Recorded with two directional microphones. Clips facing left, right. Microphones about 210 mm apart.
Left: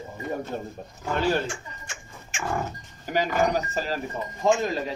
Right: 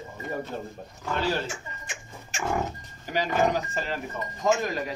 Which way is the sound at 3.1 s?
45° left (ahead or behind).